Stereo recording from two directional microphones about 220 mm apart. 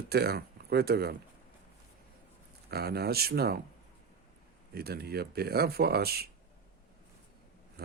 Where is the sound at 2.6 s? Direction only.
45° right (ahead or behind).